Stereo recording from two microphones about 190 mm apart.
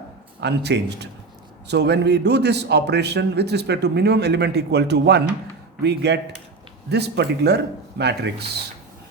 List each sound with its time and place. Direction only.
0.3 s a man's voice: 60° right (ahead or behind)